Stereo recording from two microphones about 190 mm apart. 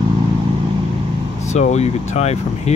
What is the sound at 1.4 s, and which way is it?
Speech, 35° left (ahead or behind).